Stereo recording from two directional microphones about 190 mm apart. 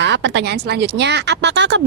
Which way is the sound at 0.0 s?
70° right (ahead or behind).